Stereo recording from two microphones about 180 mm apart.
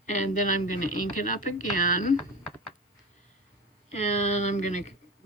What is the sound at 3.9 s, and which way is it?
Speech, 40° left (ahead or behind).